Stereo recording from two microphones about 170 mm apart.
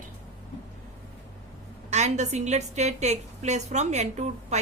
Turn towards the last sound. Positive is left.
turn(degrees=-40)  # may be behind; listen again after turning